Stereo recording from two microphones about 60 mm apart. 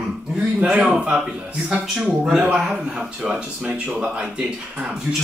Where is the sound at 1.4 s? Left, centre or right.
Right.